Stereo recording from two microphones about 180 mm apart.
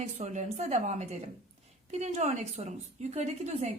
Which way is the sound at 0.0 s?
40° right (ahead or behind).